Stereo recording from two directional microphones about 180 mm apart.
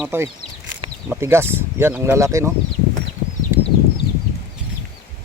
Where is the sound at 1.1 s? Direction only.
15° right (ahead or behind).